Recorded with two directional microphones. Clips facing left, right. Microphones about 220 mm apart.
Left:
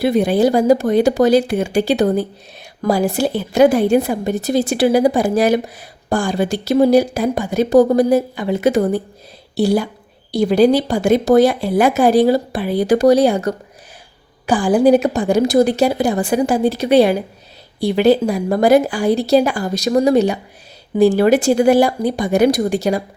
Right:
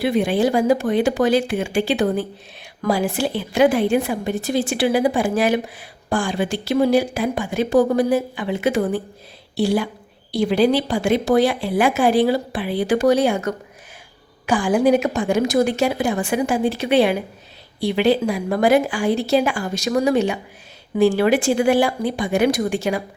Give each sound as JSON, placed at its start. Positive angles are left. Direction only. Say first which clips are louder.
{"t": 0.0, "sound": "a woman's voice", "louder": "left 4 dB", "side_deg": 40}